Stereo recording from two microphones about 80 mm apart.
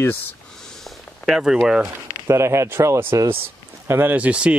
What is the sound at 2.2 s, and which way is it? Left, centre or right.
Speech, right.